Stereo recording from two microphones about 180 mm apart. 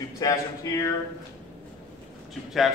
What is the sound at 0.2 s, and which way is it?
Speech, 20° left (ahead or behind).